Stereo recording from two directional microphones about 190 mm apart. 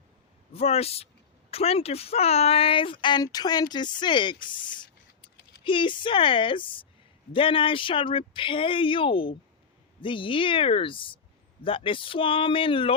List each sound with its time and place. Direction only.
0.5 s a man's voice: 30° left (ahead or behind)